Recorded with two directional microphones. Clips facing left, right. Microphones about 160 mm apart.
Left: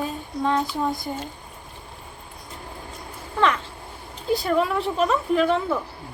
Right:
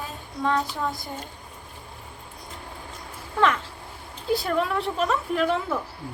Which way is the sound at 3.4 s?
5° right (ahead or behind).